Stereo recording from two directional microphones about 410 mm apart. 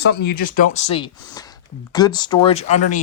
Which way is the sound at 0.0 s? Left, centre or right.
Left.